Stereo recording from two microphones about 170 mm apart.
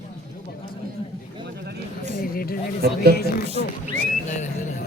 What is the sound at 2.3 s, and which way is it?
Speech, 60° left (ahead or behind).